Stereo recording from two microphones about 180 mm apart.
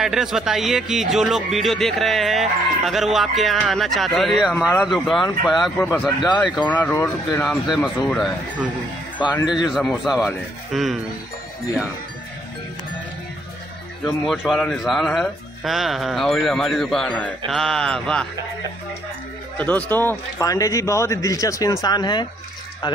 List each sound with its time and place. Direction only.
0.0 s a man's voice: centre (ahead or behind); by 7.4 s 15° left (ahead or behind)
7.4 s speech: centre (ahead or behind)
9.2 s speech: 20° left (ahead or behind)
9.7 s speech: centre (ahead or behind)
14.0 s speech: 5° right (ahead or behind)
19.5 s a man's voice: 10° left (ahead or behind)